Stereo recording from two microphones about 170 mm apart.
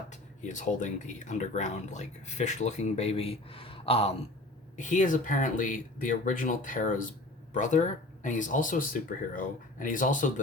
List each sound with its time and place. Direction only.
0.1 s speech: 45° left (ahead or behind)
4.8 s speech: 45° left (ahead or behind)